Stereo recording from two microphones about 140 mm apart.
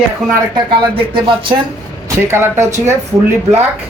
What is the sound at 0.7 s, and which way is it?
Speech, 35° right (ahead or behind).